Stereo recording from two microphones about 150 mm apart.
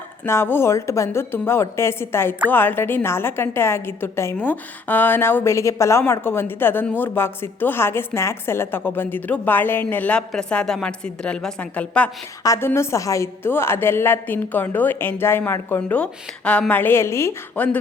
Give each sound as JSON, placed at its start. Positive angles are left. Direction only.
{"t": 0.3, "sound": "a woman's voice", "side_deg": 15}
{"t": 12.4, "sound": "a woman's voice", "side_deg": 20}